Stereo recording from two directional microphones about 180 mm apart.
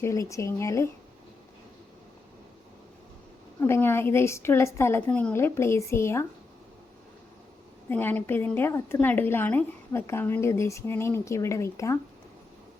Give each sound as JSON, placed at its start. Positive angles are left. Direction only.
{"t": 0.0, "sound": "a woman's voice", "side_deg": 15}
{"t": 3.6, "sound": "a woman's voice", "side_deg": 10}
{"t": 7.9, "sound": "a woman's voice", "side_deg": 10}